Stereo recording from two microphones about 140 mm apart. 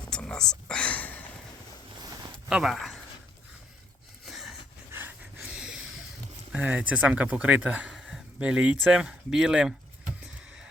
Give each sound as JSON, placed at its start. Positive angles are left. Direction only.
{"t": 0.1, "sound": "whispering", "side_deg": 5}
{"t": 2.0, "sound": "a sound", "side_deg": -30}
{"t": 2.5, "sound": "speech", "side_deg": -5}
{"t": 4.3, "sound": "a sound", "side_deg": 0}
{"t": 4.9, "sound": "pant", "side_deg": -15}
{"t": 6.5, "sound": "speech", "side_deg": -10}